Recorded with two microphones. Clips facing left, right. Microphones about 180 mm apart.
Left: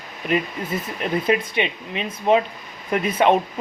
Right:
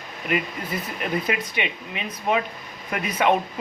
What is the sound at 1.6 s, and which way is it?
Speech, 25° left (ahead or behind).